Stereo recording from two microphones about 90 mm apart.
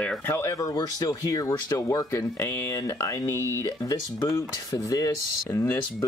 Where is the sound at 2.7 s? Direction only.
35° left (ahead or behind).